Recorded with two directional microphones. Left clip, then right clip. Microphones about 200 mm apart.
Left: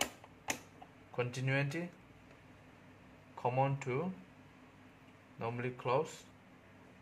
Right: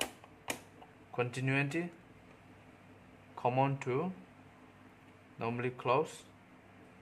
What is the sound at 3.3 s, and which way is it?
Speech, 15° right (ahead or behind).